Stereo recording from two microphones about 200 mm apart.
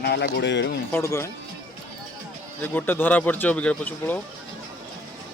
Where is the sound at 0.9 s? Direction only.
15° left (ahead or behind).